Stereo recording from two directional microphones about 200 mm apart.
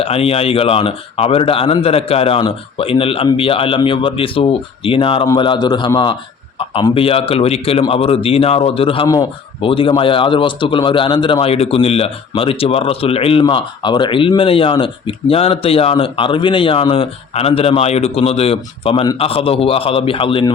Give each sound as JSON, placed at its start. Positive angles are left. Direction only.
{"t": 0.0, "sound": "speech", "side_deg": 30}